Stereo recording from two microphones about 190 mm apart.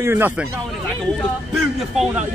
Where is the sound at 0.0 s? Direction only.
10° right (ahead or behind).